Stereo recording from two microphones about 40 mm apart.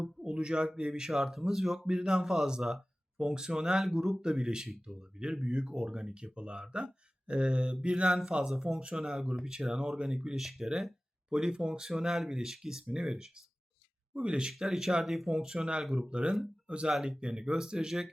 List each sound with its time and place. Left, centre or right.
0.2 s a sound: right
0.8 s speech: right
1.1 s speech: centre
1.9 s speech: centre
3.2 s speech: centre
4.2 s speech: right
10.3 s speech: centre
11.3 s speech: centre
14.1 s speech: right
14.5 s speech: centre
15.3 s speech: centre